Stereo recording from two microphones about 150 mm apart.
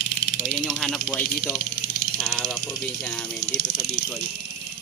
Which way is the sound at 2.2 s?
5° left (ahead or behind).